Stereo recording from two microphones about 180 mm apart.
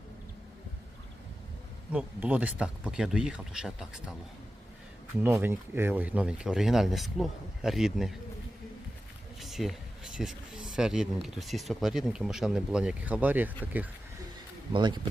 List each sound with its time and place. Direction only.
1.9 s speech: 5° right (ahead or behind)
5.2 s speech: 10° right (ahead or behind)
9.4 s speech: centre (ahead or behind)
14.7 s speech: 25° right (ahead or behind)